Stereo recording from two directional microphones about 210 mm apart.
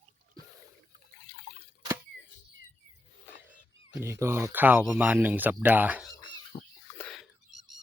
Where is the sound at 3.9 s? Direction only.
15° right (ahead or behind).